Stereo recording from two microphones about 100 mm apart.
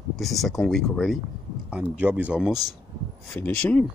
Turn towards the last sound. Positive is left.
turn(degrees=10)  # may be behind; listen again after turning